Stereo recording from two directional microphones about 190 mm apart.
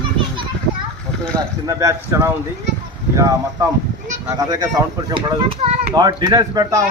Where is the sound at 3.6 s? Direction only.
15° right (ahead or behind).